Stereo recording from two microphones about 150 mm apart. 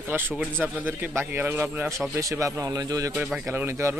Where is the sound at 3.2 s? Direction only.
5° right (ahead or behind).